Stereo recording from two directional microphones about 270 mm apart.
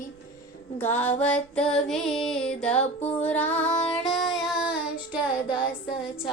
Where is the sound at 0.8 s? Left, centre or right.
Centre.